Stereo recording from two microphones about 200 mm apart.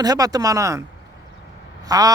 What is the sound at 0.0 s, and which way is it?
Speech, 20° right (ahead or behind).